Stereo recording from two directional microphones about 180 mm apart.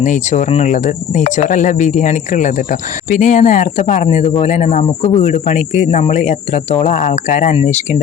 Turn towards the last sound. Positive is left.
turn(degrees=35)  # may be behind; listen again after turning